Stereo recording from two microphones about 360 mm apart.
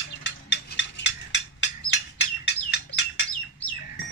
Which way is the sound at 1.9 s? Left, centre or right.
Left.